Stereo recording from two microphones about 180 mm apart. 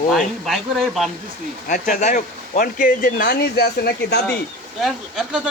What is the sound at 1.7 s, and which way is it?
Speech, 45° left (ahead or behind).